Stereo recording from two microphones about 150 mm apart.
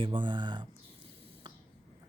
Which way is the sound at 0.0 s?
35° right (ahead or behind).